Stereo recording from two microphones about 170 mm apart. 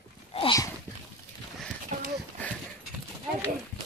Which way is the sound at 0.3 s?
30° left (ahead or behind).